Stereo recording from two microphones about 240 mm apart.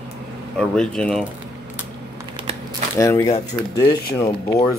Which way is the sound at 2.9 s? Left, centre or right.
Centre.